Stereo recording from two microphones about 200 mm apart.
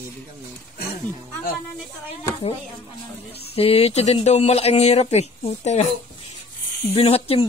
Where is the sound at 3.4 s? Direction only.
30° left (ahead or behind).